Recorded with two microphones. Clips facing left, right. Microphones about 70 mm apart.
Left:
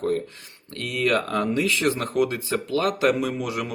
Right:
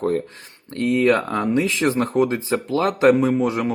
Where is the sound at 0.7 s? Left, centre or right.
Right.